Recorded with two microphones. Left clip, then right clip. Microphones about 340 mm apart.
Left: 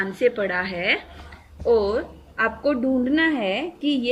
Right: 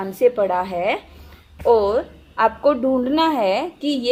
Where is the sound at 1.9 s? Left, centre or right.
Right.